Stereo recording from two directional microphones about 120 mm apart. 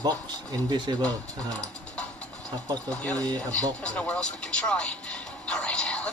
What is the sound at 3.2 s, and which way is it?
Speech, 30° right (ahead or behind).